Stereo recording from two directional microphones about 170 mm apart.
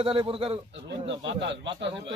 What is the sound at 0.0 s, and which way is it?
Speech, 35° right (ahead or behind).